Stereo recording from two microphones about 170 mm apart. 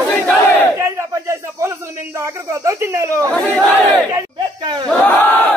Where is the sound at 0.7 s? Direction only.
15° right (ahead or behind).